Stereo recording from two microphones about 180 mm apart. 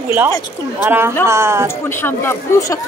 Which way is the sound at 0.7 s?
10° right (ahead or behind).